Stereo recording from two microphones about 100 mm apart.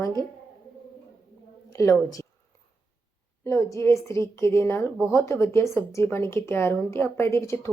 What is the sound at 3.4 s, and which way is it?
Speech, 30° left (ahead or behind).